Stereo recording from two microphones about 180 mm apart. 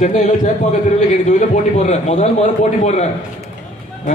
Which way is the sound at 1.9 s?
40° left (ahead or behind).